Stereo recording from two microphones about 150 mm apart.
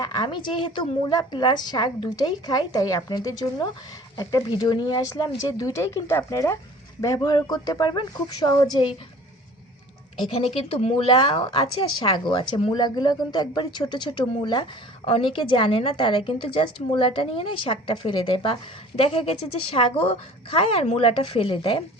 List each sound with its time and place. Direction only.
0.0 s a woman's voice: 25° left (ahead or behind)
10.3 s speech: 40° left (ahead or behind)